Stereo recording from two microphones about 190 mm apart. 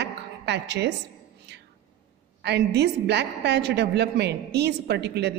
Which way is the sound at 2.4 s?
60° right (ahead or behind).